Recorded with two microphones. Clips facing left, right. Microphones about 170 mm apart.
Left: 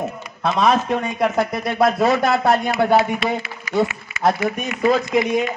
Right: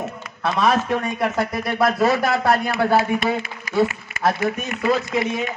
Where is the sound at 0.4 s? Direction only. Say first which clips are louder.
Left 2 dB; 20° left (ahead or behind).